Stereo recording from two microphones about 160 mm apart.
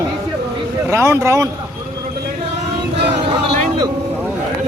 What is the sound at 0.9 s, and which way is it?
Speech, 15° right (ahead or behind).